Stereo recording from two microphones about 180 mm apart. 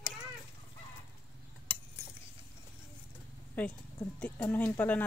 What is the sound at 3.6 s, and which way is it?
Speech, 10° left (ahead or behind).